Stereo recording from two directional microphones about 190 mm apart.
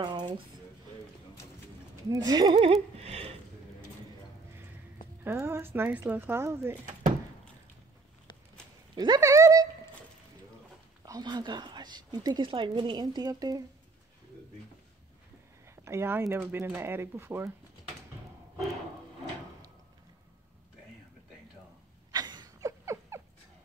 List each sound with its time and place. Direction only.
0.0 s speech: 25° right (ahead or behind)
2.0 s speech: 20° right (ahead or behind)
2.5 s a sound: 35° right (ahead or behind)
5.2 s speech: 15° right (ahead or behind)
6.9 s a sound: 45° right (ahead or behind)
8.9 s speech: 20° right (ahead or behind)
11.1 s speech: 20° right (ahead or behind)
15.7 s speech: 15° right (ahead or behind)
22.1 s dog: 20° right (ahead or behind)